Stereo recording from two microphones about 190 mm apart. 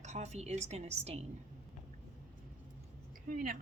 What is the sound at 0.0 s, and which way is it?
A woman's voice, 35° right (ahead or behind).